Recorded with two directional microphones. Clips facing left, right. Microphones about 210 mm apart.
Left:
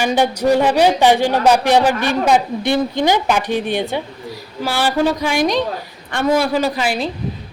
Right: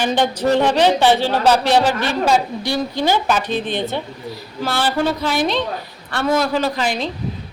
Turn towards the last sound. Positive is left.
turn(degrees=10)  # may be behind; listen again after turning